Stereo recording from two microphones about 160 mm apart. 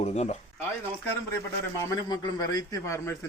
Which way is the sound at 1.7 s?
20° left (ahead or behind).